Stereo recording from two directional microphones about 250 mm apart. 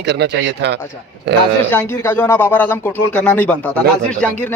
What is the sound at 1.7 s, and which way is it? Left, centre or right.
Speech, centre.